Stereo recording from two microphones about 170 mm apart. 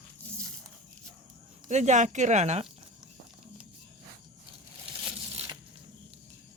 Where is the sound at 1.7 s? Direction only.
45° right (ahead or behind).